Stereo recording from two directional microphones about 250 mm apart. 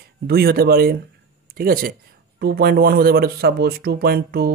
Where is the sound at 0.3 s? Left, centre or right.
Right.